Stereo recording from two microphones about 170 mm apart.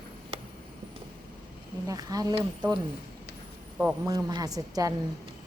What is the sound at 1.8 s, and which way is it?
Speech, 20° right (ahead or behind).